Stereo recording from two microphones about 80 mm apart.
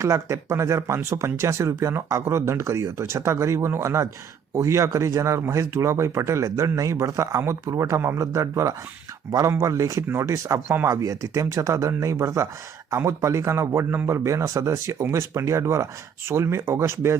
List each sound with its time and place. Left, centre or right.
0.0 s speech: right